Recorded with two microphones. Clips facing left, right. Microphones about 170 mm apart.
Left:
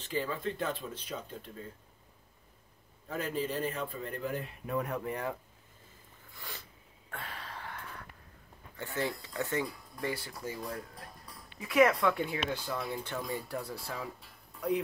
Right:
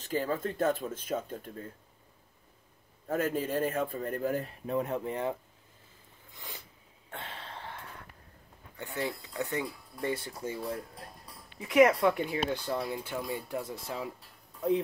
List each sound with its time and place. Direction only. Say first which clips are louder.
0.0 s speech: right 3 dB; 45° right (ahead or behind)
3.1 s speech: right 4 dB; 50° right (ahead or behind); by 5.4 s 25° right (ahead or behind)
6.3 s a sound: even; 20° right (ahead or behind)
8.7 s speech: even; 15° right (ahead or behind)
11.6 s speech: right 3 dB; 20° right (ahead or behind)
13.0 s speech: right 1 dB; 10° right (ahead or behind)